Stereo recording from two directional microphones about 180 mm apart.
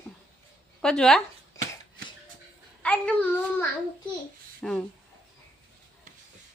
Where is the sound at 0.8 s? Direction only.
5° left (ahead or behind).